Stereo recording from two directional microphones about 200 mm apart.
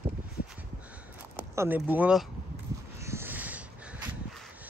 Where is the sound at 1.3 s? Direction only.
10° right (ahead or behind).